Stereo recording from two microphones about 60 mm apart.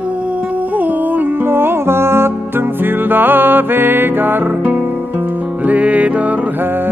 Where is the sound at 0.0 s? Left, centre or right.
Right.